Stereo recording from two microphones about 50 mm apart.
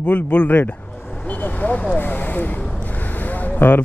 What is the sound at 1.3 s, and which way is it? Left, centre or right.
Vehicle, left.